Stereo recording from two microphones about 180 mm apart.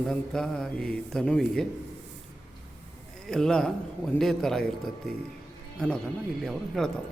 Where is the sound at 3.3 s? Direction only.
5° left (ahead or behind).